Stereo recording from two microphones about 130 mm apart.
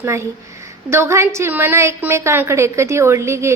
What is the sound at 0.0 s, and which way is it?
A woman's voice, 20° right (ahead or behind).